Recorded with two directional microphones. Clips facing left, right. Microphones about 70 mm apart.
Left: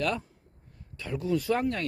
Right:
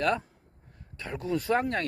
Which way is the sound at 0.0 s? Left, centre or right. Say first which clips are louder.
Right 3 dB; right.